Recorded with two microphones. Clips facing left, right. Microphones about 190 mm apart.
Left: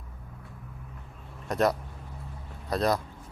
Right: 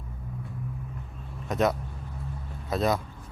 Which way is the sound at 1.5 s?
Centre (ahead or behind).